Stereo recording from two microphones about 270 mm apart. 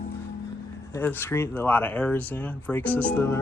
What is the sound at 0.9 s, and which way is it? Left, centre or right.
Speech, centre.